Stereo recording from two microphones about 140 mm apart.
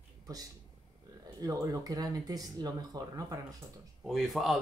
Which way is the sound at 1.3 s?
25° right (ahead or behind).